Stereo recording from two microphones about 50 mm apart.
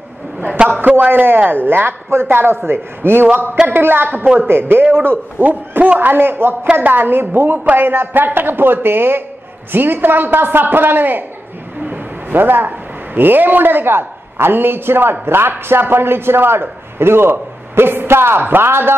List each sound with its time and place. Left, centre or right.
0.7 s a man's voice: right